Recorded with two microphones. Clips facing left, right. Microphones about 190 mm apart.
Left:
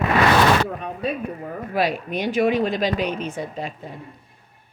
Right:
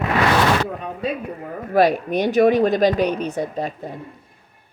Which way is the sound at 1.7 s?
45° right (ahead or behind).